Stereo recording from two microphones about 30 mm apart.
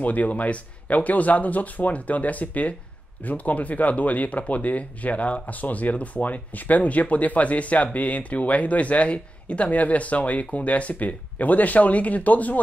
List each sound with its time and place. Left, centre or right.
0.0 s speech: left
5.5 s speech: left